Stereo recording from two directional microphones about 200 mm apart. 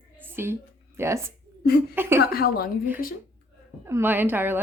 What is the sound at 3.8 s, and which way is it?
Speech, 10° right (ahead or behind).